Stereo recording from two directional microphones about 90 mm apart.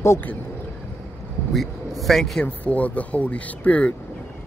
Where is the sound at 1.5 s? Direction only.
Centre (ahead or behind).